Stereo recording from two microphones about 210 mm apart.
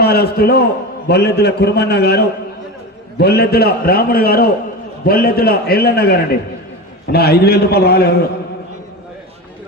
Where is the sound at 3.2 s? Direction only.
50° left (ahead or behind).